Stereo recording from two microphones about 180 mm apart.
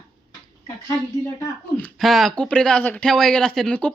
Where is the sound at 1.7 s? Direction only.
5° left (ahead or behind).